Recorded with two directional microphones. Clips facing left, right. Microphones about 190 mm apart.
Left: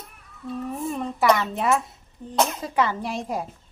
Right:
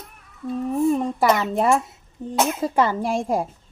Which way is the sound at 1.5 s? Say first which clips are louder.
Right 4 dB; 45° right (ahead or behind).